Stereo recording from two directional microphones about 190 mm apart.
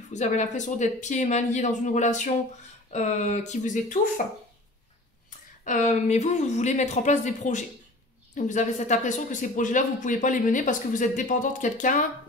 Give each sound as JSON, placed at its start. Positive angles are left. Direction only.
{"t": 0.1, "sound": "speech", "side_deg": 40}
{"t": 5.6, "sound": "speech", "side_deg": 40}